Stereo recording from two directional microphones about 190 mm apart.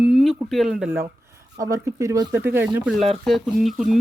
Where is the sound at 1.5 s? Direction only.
15° right (ahead or behind).